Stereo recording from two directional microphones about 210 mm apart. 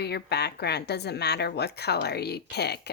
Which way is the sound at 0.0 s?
50° left (ahead or behind).